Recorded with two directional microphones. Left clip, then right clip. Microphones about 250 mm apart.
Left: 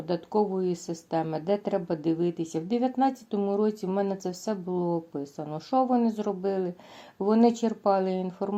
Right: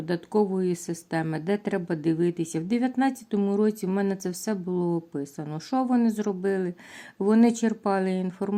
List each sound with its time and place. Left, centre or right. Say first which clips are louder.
0.0 s speech: right 1 dB; right